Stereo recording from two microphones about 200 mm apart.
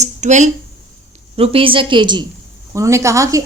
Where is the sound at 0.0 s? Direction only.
35° right (ahead or behind).